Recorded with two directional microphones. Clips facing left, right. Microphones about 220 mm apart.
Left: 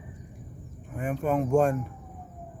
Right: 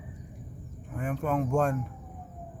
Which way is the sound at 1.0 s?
10° left (ahead or behind).